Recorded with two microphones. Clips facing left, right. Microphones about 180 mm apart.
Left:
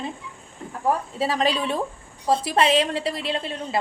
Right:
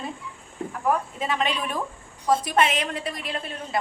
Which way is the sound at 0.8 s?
35° left (ahead or behind).